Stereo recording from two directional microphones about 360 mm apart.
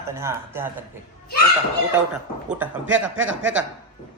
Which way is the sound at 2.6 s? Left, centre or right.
Centre.